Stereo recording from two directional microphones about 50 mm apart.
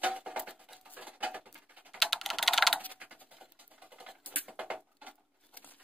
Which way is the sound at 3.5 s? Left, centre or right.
Right.